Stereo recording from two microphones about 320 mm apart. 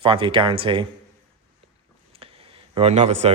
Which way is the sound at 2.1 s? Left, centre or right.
Centre.